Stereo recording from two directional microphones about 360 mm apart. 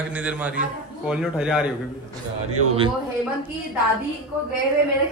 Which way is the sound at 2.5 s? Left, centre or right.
Right.